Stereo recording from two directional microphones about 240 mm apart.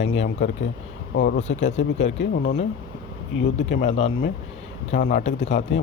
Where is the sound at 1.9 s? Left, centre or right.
Left.